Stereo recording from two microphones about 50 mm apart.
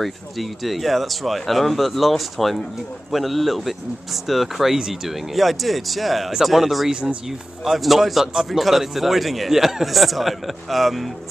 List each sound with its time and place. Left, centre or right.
0.0 s speech: centre
6.9 s speech: right
7.2 s speech: centre